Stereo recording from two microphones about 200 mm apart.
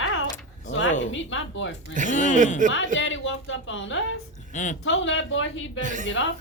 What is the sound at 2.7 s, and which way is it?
A woman's voice, 70° left (ahead or behind).